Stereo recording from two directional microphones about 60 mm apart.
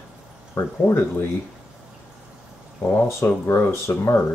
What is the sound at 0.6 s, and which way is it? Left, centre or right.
Speech, left.